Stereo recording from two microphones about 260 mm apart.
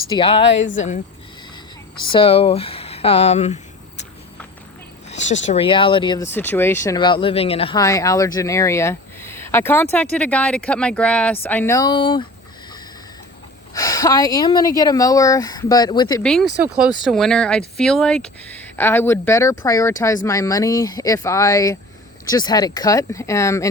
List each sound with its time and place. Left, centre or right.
0.1 s speech: centre
2.1 s speech: left
5.0 s speech: left
13.7 s speech: centre
16.2 s speech: centre